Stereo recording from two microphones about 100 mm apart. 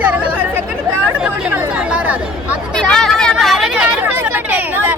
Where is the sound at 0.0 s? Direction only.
15° right (ahead or behind).